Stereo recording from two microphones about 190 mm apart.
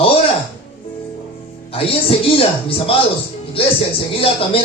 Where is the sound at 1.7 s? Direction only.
30° left (ahead or behind).